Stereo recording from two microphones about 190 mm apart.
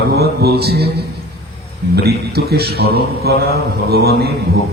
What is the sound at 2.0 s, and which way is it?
A man's voice, 55° right (ahead or behind).